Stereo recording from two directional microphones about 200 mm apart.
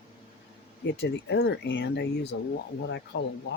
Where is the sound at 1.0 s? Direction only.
55° left (ahead or behind).